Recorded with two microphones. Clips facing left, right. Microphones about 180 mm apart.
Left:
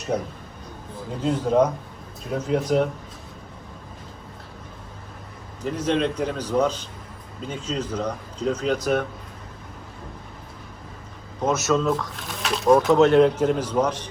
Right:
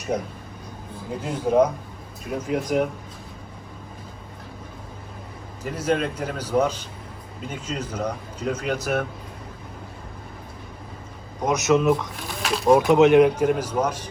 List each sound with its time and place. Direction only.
1.2 s speech: 10° right (ahead or behind)
5.6 s speech: 5° right (ahead or behind)
11.4 s speech: 15° right (ahead or behind)
12.3 s speech: centre (ahead or behind)
12.9 s speech: 15° right (ahead or behind)